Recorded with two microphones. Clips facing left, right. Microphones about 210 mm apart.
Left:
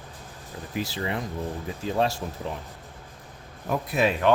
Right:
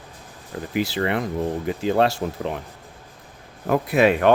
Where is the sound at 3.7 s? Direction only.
70° right (ahead or behind).